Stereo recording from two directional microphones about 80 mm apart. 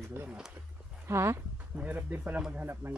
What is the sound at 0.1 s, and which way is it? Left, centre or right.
A woman's voice, right.